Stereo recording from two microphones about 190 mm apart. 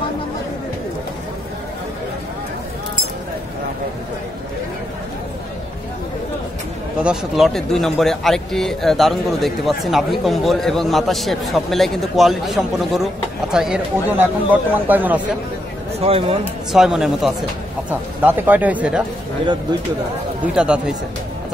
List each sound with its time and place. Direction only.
7.0 s speech: 5° right (ahead or behind)
16.0 s speech: 30° right (ahead or behind)
16.7 s speech: centre (ahead or behind)
20.5 s speech: 5° right (ahead or behind)